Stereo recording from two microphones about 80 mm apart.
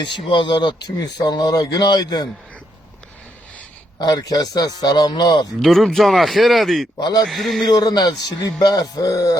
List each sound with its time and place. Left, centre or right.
0.0 s speech: left
3.9 s speech: left
5.6 s speech: centre
7.7 s speech: left